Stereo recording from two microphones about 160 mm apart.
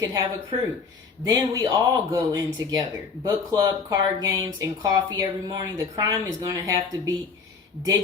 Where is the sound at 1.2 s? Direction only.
20° right (ahead or behind).